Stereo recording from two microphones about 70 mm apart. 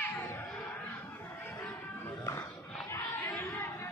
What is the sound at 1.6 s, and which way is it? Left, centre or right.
Music, left.